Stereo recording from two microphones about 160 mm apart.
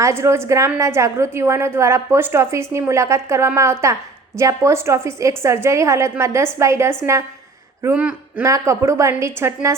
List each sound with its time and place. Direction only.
0.0 s a woman's voice: 15° right (ahead or behind)
7.9 s speech: 10° right (ahead or behind)
8.4 s a woman's voice: 20° right (ahead or behind)